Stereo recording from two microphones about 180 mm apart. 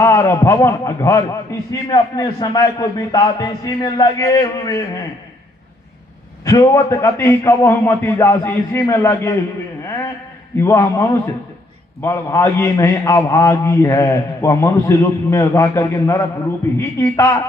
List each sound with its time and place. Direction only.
0.0 s a man's voice: 15° left (ahead or behind)
6.4 s a man's voice: 15° left (ahead or behind)
10.6 s a man's voice: 15° left (ahead or behind)